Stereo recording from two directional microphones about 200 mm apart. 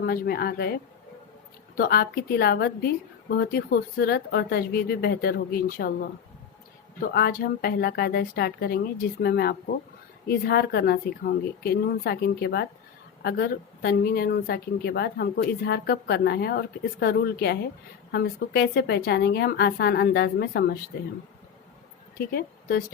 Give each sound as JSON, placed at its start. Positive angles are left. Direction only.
{"t": 0.0, "sound": "a woman's voice", "side_deg": 50}
{"t": 7.0, "sound": "a woman's voice", "side_deg": 50}
{"t": 22.2, "sound": "speech", "side_deg": 50}